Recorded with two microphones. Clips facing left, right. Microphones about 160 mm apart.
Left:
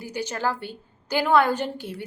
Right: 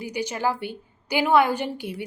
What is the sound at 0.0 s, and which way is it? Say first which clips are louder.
A woman's voice: right 1 dB; 15° right (ahead or behind).